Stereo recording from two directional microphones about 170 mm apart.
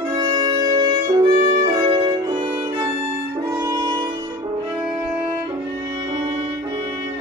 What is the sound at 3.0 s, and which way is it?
Music, 20° right (ahead or behind).